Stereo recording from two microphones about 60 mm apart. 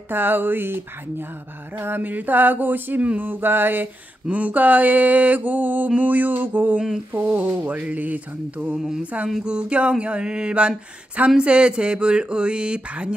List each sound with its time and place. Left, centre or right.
0.1 s a sound: right
4.3 s mantra: right
8.7 s speech: centre